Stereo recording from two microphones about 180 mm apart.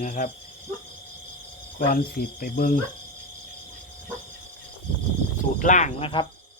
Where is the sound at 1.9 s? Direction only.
50° left (ahead or behind).